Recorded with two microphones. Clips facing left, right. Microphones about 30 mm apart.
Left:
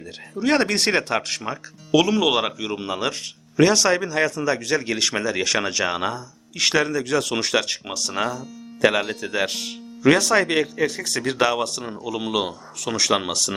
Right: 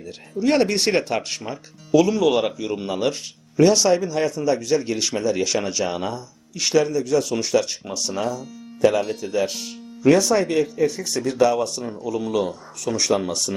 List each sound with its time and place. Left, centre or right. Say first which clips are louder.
0.3 s speech: right 1 dB; left
3.6 s speech: right 1 dB; left
11.9 s speech: right 1 dB; left